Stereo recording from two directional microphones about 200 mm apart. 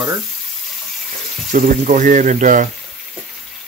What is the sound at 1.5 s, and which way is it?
Speech, 45° right (ahead or behind).